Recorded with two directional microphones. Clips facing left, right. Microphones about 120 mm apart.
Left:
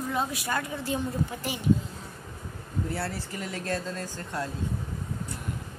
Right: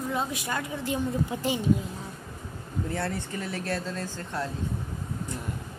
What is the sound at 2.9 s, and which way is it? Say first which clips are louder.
Speech: right 2 dB; 5° left (ahead or behind).